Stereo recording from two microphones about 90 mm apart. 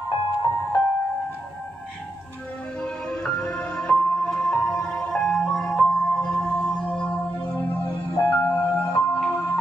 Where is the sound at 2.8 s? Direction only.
10° left (ahead or behind).